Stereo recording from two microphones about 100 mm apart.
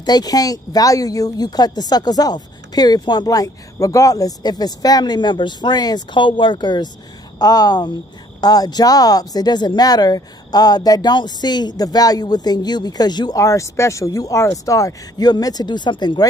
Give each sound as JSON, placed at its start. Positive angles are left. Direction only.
{"t": 0.0, "sound": "speech", "side_deg": 40}
{"t": 7.3, "sound": "speech", "side_deg": 40}
{"t": 13.4, "sound": "speech", "side_deg": 30}